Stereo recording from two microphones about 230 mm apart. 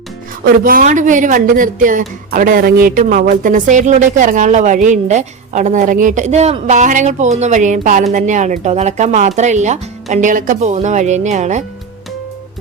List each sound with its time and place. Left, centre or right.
0.4 s speech: right